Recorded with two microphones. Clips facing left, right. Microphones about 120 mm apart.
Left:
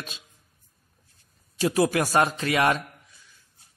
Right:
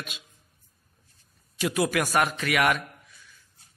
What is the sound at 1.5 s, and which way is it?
A man's voice, 30° left (ahead or behind).